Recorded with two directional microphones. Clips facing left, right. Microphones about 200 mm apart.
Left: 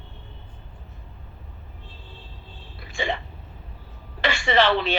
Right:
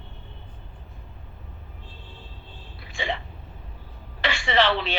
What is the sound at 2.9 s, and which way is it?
Hiccup, 45° left (ahead or behind).